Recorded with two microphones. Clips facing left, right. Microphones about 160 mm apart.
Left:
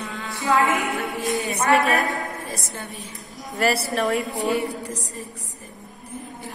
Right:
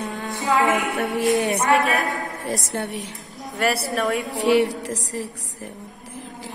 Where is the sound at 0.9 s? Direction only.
75° right (ahead or behind).